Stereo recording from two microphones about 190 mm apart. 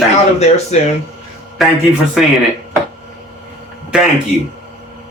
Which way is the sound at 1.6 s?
Centre (ahead or behind).